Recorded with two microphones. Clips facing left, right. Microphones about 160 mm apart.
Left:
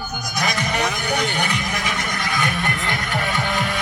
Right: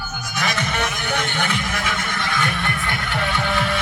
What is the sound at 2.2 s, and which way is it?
Music, 40° left (ahead or behind).